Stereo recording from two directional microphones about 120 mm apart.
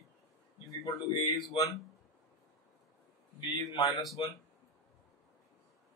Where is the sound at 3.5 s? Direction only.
30° left (ahead or behind).